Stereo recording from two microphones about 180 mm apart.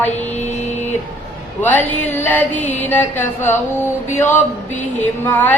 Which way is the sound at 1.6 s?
10° left (ahead or behind).